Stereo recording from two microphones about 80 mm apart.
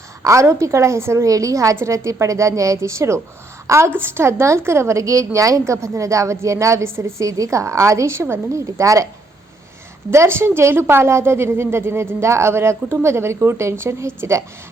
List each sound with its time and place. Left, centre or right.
0.2 s a woman's voice: right
10.1 s a woman's voice: right